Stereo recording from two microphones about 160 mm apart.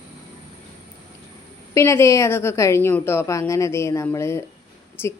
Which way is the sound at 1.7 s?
20° left (ahead or behind).